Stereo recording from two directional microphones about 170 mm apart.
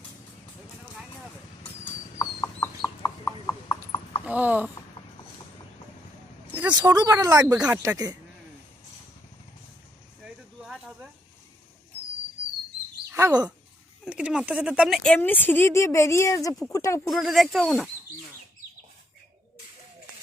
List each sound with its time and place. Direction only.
1.8 s horse: 15° left (ahead or behind)
4.3 s speech: 10° right (ahead or behind)
6.7 s speech: 25° right (ahead or behind)
10.2 s snake: 5° right (ahead or behind)
13.1 s chirp: 20° right (ahead or behind)
14.0 s speech: 5° right (ahead or behind); by 17.2 s 20° left (ahead or behind)
17.2 s speech: centre (ahead or behind)